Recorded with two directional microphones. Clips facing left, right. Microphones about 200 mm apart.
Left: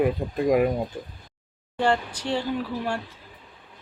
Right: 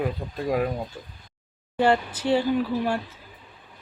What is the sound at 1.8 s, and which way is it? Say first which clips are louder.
Speech: right 2 dB; 5° right (ahead or behind).